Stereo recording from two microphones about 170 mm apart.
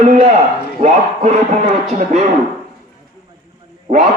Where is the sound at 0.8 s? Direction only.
40° right (ahead or behind).